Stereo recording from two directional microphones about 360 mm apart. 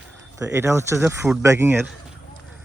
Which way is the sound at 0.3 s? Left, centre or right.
Centre.